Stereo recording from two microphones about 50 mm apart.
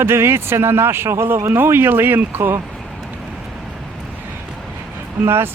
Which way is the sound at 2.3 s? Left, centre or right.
Right.